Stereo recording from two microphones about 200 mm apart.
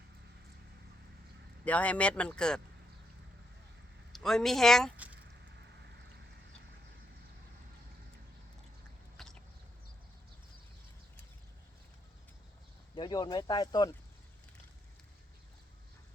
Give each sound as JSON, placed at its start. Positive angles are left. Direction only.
{"t": 1.6, "sound": "speech", "side_deg": 5}
{"t": 4.1, "sound": "speech", "side_deg": 0}
{"t": 9.1, "sound": "a sound", "side_deg": 0}
{"t": 13.0, "sound": "speech", "side_deg": 20}